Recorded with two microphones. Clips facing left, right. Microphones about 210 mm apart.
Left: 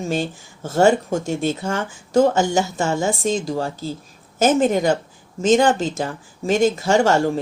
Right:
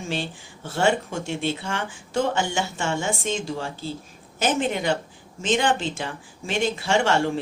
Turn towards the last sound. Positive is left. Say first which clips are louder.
# left 5 dB
turn(degrees=40)  # may be behind; listen again after turning